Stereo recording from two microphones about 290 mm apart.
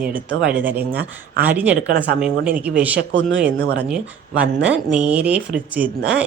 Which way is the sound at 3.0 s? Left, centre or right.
Right.